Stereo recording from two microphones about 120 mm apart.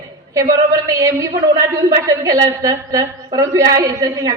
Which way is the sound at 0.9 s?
30° right (ahead or behind).